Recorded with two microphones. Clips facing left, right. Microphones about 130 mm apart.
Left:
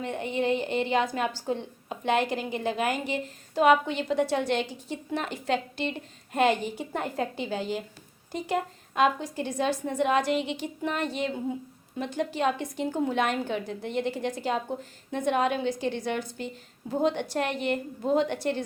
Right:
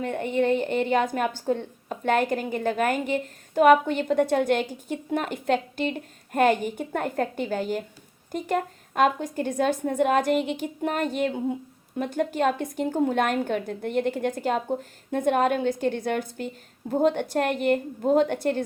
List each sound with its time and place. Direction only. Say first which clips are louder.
0.0 s a woman's voice: right 4 dB; 45° right (ahead or behind)